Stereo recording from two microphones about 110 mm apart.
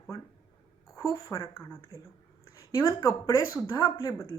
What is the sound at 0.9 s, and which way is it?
Speech, 30° left (ahead or behind).